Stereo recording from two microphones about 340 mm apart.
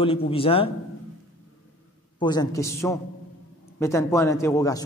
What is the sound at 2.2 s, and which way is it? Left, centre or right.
A man's voice, centre.